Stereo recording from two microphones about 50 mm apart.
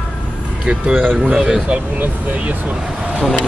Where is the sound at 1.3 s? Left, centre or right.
Centre.